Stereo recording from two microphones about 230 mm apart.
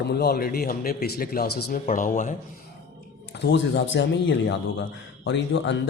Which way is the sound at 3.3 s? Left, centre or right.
Left.